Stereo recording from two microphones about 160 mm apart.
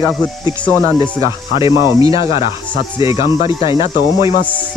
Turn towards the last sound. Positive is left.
turn(degrees=35)  # may be behind; listen again after turning